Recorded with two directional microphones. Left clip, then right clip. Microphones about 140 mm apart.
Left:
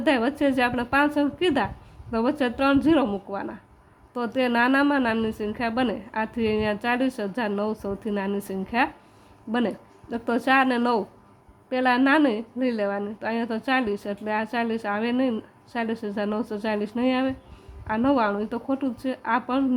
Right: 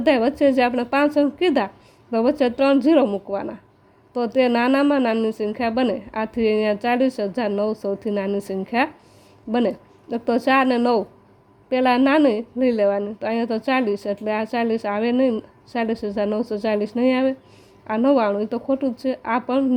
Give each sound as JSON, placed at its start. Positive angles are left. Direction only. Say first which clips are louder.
{"t": 0.0, "sound": "a woman's voice", "louder": "right 5 dB", "side_deg": -20}